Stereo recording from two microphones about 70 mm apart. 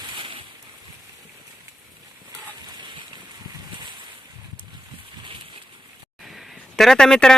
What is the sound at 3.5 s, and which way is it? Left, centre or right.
Boat, right.